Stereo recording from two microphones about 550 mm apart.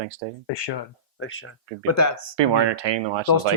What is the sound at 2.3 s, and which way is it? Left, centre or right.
Speech, right.